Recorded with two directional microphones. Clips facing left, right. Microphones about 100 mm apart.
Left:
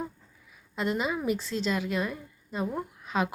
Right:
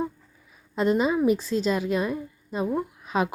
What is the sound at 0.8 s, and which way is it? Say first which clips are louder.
Speech: right 7 dB; 25° right (ahead or behind).